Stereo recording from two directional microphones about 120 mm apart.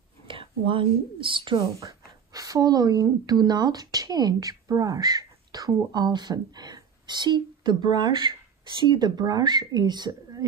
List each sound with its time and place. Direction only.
0.3 s a sound: 45° right (ahead or behind)
1.2 s speech: 45° right (ahead or behind)
1.8 s a woman's voice: 30° right (ahead or behind)